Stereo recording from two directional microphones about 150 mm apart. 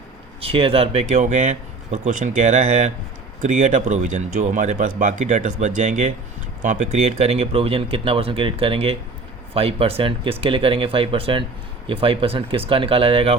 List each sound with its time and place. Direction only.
0.4 s speech: 40° right (ahead or behind)